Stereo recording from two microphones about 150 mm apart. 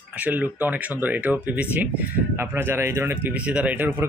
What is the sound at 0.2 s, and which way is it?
Speech, 10° right (ahead or behind).